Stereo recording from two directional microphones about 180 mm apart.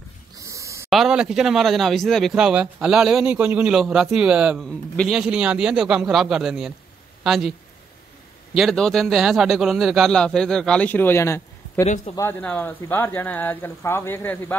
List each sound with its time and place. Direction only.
0.4 s a sound: 15° right (ahead or behind)
0.8 s speech: centre (ahead or behind)
8.5 s speech: centre (ahead or behind)